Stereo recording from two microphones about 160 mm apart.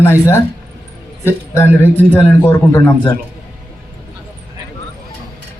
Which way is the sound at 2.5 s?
10° left (ahead or behind).